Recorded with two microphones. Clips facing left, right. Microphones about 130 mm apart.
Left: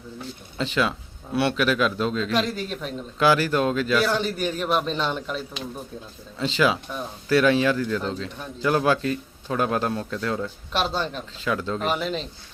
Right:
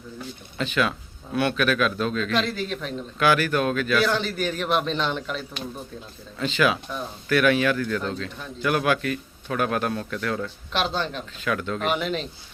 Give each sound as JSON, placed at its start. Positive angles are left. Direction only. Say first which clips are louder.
{"t": 0.6, "sound": "a man's voice", "louder": "even", "side_deg": 20}
{"t": 2.3, "sound": "a man's voice", "louder": "even", "side_deg": 5}
{"t": 3.2, "sound": "a man's voice", "louder": "left 1 dB", "side_deg": 30}
{"t": 4.0, "sound": "a man's voice", "louder": "even", "side_deg": 10}
{"t": 6.4, "sound": "a man's voice", "louder": "left 1 dB", "side_deg": 25}
{"t": 10.4, "sound": "a man's voice", "louder": "left 1 dB", "side_deg": 5}
{"t": 11.3, "sound": "a man's voice", "louder": "left 1 dB", "side_deg": 25}
{"t": 11.8, "sound": "a man's voice", "louder": "even", "side_deg": 0}